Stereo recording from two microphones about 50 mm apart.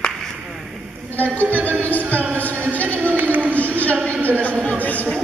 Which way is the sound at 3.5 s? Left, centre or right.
Left.